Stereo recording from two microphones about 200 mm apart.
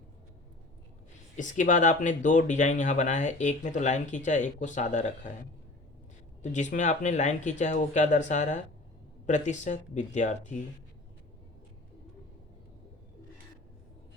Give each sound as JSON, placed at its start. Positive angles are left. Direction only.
{"t": 1.4, "sound": "speech", "side_deg": 40}
{"t": 6.4, "sound": "speech", "side_deg": 35}